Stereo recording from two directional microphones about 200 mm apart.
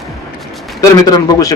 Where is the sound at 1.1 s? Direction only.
20° left (ahead or behind).